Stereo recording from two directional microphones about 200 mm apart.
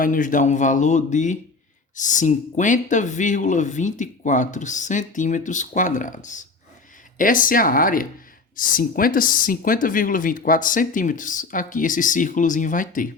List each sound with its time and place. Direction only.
0.0 s speech: 40° left (ahead or behind)